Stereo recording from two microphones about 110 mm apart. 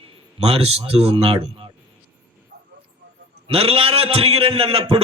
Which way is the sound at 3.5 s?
60° right (ahead or behind).